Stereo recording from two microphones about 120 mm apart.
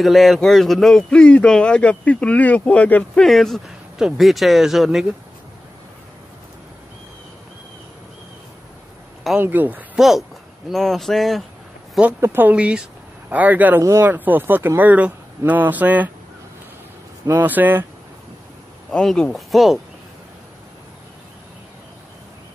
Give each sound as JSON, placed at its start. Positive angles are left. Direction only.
{"t": 0.0, "sound": "a man's voice", "side_deg": 0}
{"t": 9.4, "sound": "speech", "side_deg": -15}
{"t": 9.9, "sound": "a man's voice", "side_deg": 0}
{"t": 12.0, "sound": "speech", "side_deg": -15}
{"t": 17.3, "sound": "speech", "side_deg": -15}
{"t": 18.9, "sound": "a man's voice", "side_deg": 5}